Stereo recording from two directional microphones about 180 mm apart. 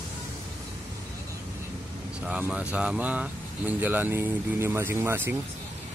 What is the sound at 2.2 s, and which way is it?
Speech, 5° right (ahead or behind).